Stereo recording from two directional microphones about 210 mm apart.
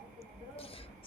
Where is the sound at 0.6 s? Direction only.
25° left (ahead or behind).